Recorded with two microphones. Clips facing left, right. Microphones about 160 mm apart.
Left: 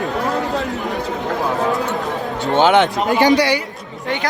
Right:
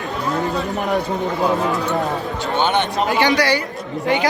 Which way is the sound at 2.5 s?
90° left.